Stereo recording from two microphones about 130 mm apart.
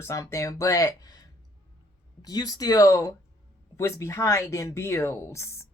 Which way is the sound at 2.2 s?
30° left (ahead or behind).